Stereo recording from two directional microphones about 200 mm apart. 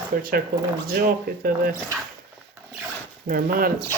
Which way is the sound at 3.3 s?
45° right (ahead or behind).